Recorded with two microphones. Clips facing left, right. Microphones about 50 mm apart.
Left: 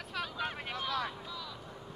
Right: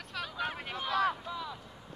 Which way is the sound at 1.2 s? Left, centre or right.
Right.